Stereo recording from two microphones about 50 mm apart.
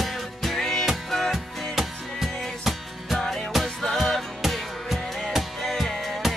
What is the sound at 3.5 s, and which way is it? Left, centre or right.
Music, centre.